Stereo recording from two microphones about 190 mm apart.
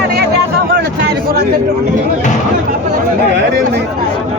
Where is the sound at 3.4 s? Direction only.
60° right (ahead or behind).